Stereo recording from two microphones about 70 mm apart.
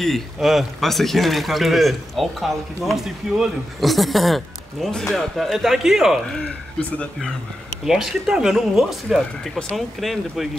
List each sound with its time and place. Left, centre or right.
0.0 s speech: centre
6.4 s speech: centre
7.8 s speech: centre